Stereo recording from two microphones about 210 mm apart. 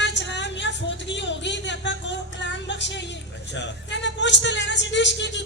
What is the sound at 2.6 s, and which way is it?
Music, 55° left (ahead or behind).